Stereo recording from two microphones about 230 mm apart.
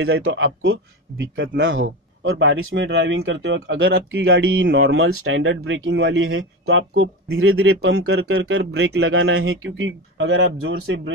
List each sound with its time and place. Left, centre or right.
0.0 s speech: right